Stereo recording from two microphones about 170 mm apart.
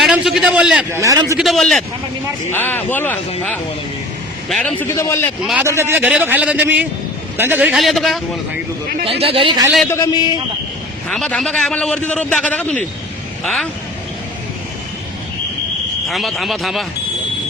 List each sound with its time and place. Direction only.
0.0 s a man's voice: centre (ahead or behind)
1.0 s a man's voice: 20° right (ahead or behind)
1.4 s a man's voice: centre (ahead or behind)
2.5 s a man's voice: 10° left (ahead or behind)
5.6 s a man's voice: 15° right (ahead or behind); by 8.2 s centre (ahead or behind)
9.0 s speech: 35° right (ahead or behind)
9.9 s a man's voice: 20° left (ahead or behind)
11.1 s a man's voice: centre (ahead or behind)
16.0 s a man's voice: centre (ahead or behind)